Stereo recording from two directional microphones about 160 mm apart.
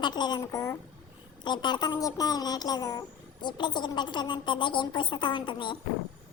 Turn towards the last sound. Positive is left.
turn(degrees=30)  # may be behind; listen again after turning